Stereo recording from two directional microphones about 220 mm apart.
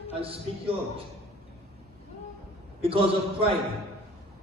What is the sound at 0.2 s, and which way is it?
Speech, 25° right (ahead or behind).